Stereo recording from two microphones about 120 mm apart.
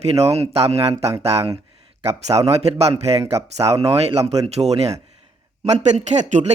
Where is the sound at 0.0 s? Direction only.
60° right (ahead or behind).